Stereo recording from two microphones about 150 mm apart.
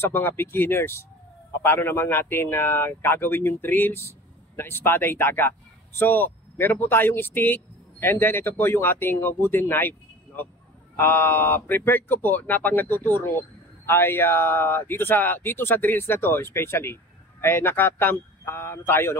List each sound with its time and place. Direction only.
0.0 s speech: 15° left (ahead or behind)